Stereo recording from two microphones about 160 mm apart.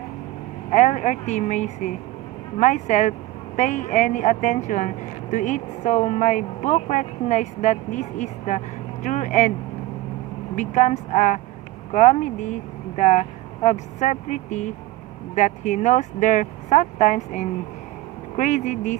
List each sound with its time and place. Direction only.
0.7 s speech: 50° left (ahead or behind)
10.5 s speech: 50° left (ahead or behind)